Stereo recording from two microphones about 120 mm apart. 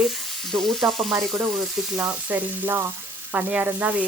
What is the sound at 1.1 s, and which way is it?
Speech, 20° right (ahead or behind).